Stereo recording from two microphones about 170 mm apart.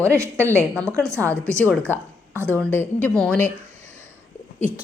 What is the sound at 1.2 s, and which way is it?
Speech, 10° left (ahead or behind).